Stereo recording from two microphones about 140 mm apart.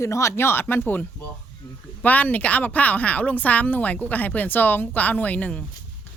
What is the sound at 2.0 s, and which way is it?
A woman's voice, 10° left (ahead or behind).